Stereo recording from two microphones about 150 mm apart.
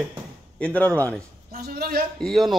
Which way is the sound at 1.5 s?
80° right.